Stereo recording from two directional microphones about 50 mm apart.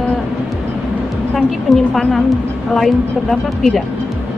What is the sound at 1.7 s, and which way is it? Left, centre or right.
A woman's voice, centre.